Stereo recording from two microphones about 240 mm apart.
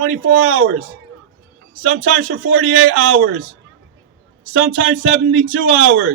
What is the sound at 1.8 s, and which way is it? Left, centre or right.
A man's voice, right.